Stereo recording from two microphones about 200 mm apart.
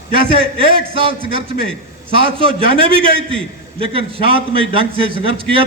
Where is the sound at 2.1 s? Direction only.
25° right (ahead or behind).